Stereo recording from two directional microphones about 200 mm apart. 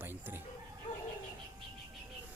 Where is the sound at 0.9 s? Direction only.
25° left (ahead or behind).